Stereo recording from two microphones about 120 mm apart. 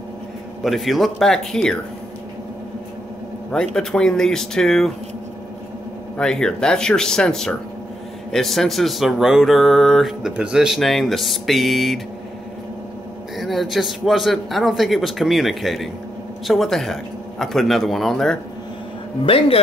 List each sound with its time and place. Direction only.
0.7 s speech: centre (ahead or behind)
3.5 s speech: 5° left (ahead or behind)
6.1 s speech: 5° left (ahead or behind)
13.4 s speech: centre (ahead or behind)
19.2 s a man's voice: 50° left (ahead or behind)